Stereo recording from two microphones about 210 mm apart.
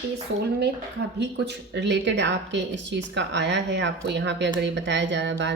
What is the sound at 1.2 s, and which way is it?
Speech, 55° right (ahead or behind).